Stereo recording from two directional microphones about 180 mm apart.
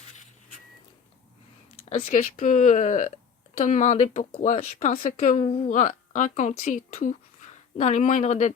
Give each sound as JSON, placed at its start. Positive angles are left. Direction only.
{"t": 1.8, "sound": "speech", "side_deg": 40}